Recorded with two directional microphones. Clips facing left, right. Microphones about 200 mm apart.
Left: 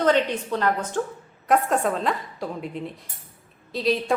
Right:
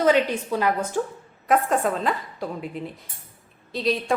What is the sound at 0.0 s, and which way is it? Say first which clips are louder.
A woman's voice: right 1 dB; 10° right (ahead or behind).